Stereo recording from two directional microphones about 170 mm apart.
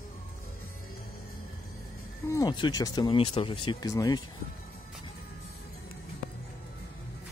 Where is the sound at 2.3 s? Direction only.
25° left (ahead or behind).